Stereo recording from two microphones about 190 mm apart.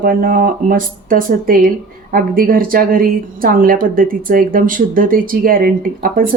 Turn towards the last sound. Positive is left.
turn(degrees=-50)  # may be behind; listen again after turning